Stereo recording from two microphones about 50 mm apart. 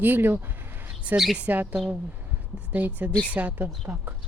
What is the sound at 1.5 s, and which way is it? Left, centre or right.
Speech, right.